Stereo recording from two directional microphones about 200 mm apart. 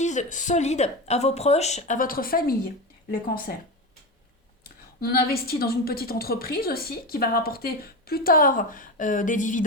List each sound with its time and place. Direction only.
0.0 s speech: 35° left (ahead or behind)
4.9 s a woman's voice: 50° left (ahead or behind)